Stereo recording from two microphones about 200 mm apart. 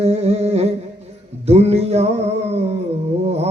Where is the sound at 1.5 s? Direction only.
30° right (ahead or behind).